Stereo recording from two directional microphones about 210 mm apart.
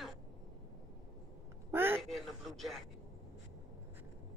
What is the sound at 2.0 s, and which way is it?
Speech, centre (ahead or behind).